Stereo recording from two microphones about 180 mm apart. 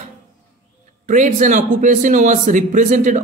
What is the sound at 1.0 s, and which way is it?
Speech, 45° right (ahead or behind).